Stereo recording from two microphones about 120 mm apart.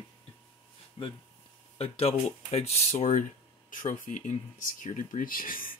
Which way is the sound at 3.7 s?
90° left.